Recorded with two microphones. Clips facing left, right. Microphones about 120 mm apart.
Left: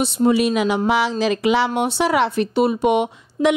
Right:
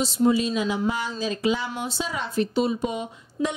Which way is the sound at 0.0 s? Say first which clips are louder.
Left 4 dB; 70° left (ahead or behind).